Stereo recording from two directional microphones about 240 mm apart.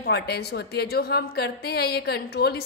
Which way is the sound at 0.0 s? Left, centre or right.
Left.